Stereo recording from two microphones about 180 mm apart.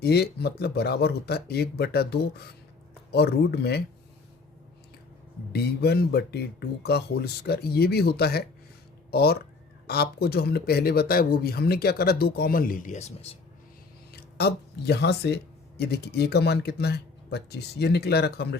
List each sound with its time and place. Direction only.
0.0 s speech: 65° left (ahead or behind)
5.5 s speech: 65° left (ahead or behind); by 13.3 s 40° left (ahead or behind)
14.1 s speech: 60° left (ahead or behind)